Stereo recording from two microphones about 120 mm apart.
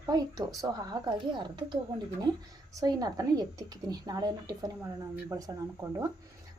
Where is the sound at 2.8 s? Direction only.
30° right (ahead or behind).